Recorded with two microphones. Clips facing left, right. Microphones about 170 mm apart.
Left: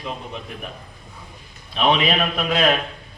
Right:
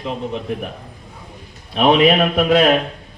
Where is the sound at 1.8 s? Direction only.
50° right (ahead or behind).